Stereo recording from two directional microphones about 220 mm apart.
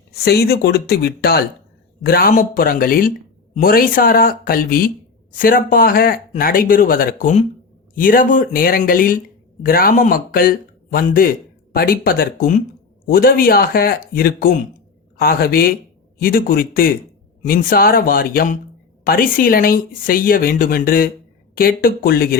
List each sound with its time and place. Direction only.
0.1 s speech: 45° left (ahead or behind)